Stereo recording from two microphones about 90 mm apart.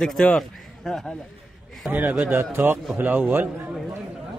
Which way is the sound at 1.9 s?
20° right (ahead or behind).